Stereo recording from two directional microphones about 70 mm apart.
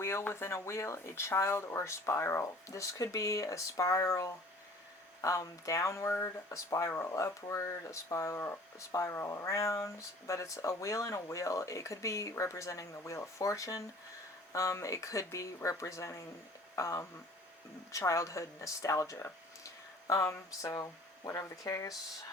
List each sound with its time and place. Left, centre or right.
0.0 s speech: left